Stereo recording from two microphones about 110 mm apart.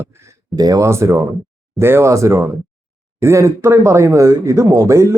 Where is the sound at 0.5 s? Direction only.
35° right (ahead or behind).